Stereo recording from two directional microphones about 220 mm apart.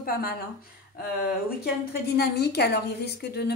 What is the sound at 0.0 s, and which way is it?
Speech, 40° left (ahead or behind).